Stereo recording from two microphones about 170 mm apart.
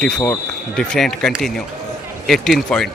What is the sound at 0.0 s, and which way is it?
A man's voice, 5° left (ahead or behind).